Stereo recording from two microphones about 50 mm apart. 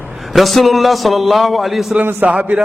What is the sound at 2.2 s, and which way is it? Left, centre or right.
Speech, right.